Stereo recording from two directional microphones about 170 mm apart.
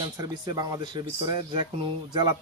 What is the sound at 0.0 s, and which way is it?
Speech, 25° right (ahead or behind).